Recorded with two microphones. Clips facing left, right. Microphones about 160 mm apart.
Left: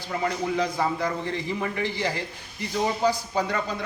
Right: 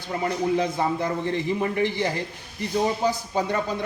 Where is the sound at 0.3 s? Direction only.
20° right (ahead or behind).